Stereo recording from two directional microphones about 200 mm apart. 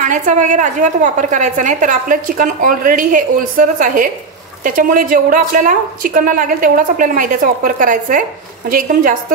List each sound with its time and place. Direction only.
0.0 s a woman's voice: 40° right (ahead or behind)